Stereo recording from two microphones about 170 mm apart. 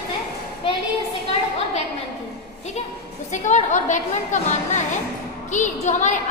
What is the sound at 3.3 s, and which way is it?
A woman's voice, 45° left (ahead or behind).